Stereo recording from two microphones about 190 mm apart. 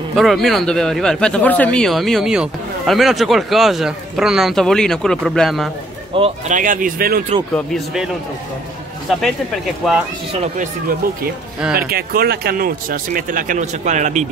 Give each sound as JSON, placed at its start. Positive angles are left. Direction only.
{"t": 0.1, "sound": "speech", "side_deg": 0}
{"t": 6.1, "sound": "speech", "side_deg": -35}
{"t": 7.5, "sound": "speech", "side_deg": 0}
{"t": 9.1, "sound": "speech", "side_deg": 0}
{"t": 10.4, "sound": "speech", "side_deg": -40}
{"t": 11.9, "sound": "speech", "side_deg": -55}